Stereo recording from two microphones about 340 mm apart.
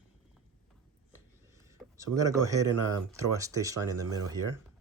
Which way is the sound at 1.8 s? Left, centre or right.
Centre.